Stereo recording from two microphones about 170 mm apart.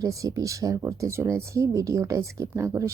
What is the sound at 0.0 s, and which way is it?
Speech, 20° right (ahead or behind).